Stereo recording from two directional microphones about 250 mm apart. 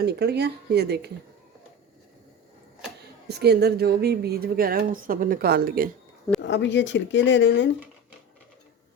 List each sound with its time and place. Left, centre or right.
0.0 s speech: right
3.2 s speech: right
6.4 s speech: left